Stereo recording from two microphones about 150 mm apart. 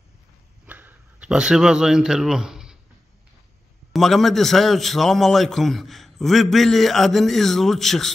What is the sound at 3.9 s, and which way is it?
A man's voice, centre (ahead or behind).